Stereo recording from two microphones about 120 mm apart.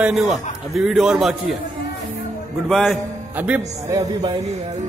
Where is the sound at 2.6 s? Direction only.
Centre (ahead or behind).